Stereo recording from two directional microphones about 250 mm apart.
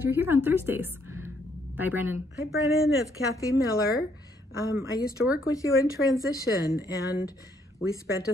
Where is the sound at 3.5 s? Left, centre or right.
Left.